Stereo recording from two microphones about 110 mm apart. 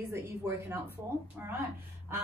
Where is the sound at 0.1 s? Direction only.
25° right (ahead or behind).